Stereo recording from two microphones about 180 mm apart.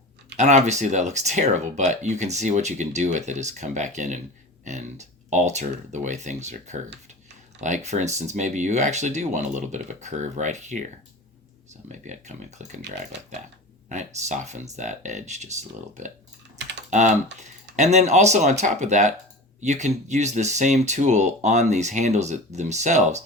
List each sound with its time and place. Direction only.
0.3 s speech: 40° right (ahead or behind)
11.9 s speech: 40° right (ahead or behind)
13.9 s speech: 40° right (ahead or behind)